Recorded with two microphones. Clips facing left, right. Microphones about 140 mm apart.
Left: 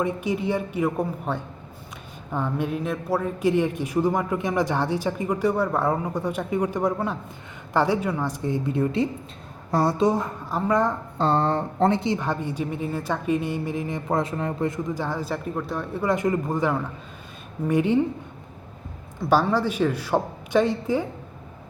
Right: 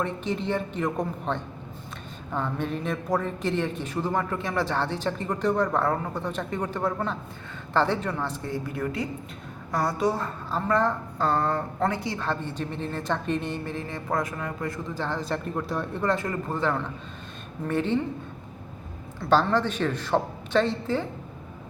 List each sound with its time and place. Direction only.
0.0 s a woman's voice: 10° left (ahead or behind)
11.2 s a woman's voice: 25° left (ahead or behind)
19.2 s a woman's voice: 10° left (ahead or behind)